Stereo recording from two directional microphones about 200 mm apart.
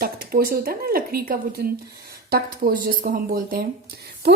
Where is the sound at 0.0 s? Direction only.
50° right (ahead or behind).